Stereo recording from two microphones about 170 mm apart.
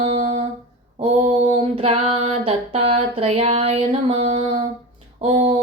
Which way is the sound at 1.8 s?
35° right (ahead or behind).